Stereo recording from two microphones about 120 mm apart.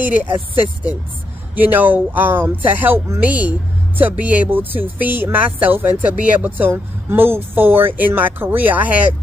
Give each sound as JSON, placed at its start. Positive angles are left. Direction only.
{"t": 1.5, "sound": "speech", "side_deg": -15}